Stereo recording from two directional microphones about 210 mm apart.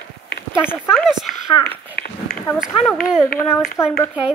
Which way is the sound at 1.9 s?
45° left (ahead or behind).